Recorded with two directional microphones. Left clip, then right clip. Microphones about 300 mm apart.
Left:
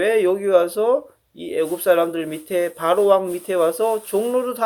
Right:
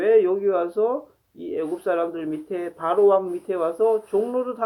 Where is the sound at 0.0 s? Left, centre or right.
Left.